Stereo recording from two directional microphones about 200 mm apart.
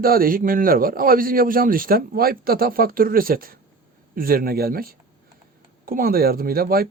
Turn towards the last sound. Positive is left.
turn(degrees=-50)  # may be behind; listen again after turning